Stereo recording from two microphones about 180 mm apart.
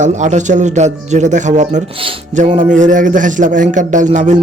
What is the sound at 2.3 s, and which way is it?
A man's voice, 40° right (ahead or behind).